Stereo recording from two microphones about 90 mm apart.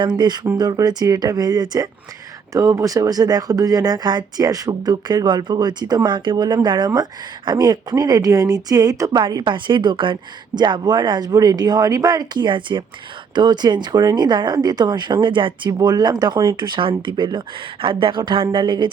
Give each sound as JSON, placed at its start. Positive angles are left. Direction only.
{"t": 0.0, "sound": "speech", "side_deg": -55}
{"t": 2.5, "sound": "speech", "side_deg": -35}